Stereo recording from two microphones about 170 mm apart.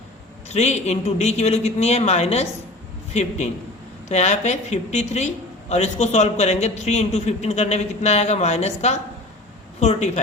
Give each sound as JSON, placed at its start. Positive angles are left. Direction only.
{"t": 0.4, "sound": "a man's voice", "side_deg": 40}